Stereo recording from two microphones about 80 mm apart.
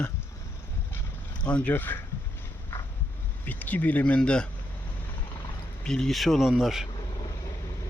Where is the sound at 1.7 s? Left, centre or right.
Left.